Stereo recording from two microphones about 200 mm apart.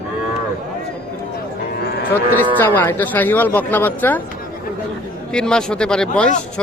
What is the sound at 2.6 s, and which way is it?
Speech, 10° left (ahead or behind).